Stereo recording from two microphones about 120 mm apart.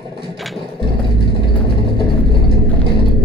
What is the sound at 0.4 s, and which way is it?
Vehicle, centre (ahead or behind).